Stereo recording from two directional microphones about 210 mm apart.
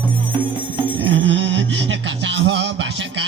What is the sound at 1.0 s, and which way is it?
Music, 60° right (ahead or behind).